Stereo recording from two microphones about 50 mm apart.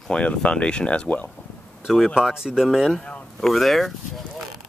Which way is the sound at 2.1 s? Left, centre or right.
Centre.